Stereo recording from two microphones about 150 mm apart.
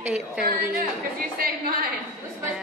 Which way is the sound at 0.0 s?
10° right (ahead or behind).